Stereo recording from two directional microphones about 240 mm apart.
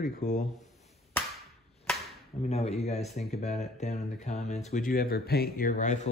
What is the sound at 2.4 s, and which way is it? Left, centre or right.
Speech, left.